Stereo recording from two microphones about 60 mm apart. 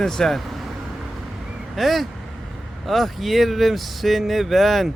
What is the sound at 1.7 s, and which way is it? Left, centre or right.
Speech, centre.